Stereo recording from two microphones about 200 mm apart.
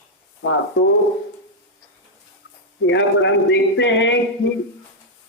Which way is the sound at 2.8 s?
65° left (ahead or behind).